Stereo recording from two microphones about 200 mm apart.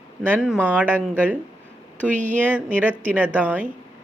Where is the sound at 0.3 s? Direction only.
5° right (ahead or behind).